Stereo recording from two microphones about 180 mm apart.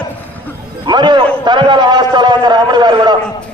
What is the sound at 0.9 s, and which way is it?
A man's voice, 25° right (ahead or behind).